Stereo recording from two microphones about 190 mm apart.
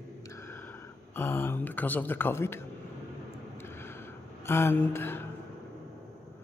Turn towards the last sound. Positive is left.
turn(degrees=10)  # may be behind; listen again after turning